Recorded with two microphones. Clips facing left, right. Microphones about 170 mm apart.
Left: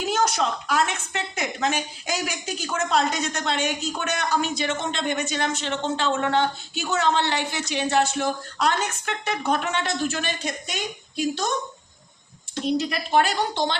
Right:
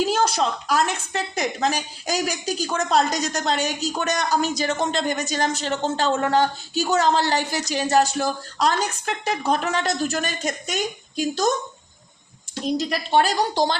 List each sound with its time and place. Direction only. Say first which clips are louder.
0.1 s a woman's voice: right 2 dB; 30° right (ahead or behind)
12.6 s a woman's voice: right 1 dB; 40° right (ahead or behind)